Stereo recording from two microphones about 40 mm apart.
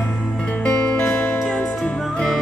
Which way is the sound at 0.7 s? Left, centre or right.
Left.